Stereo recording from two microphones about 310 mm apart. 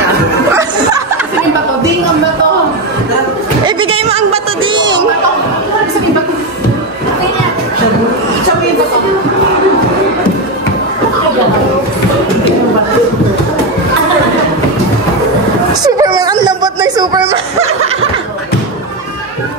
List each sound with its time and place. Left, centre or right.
0.5 s chuckle: centre
3.6 s a sound: centre
15.8 s music: centre